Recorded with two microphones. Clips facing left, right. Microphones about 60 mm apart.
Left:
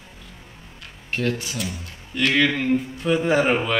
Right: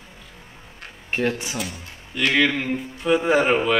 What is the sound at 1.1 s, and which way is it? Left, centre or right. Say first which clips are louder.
Speech: right 1 dB; right.